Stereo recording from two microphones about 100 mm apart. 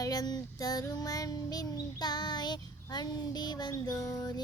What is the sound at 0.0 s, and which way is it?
Music, 40° left (ahead or behind).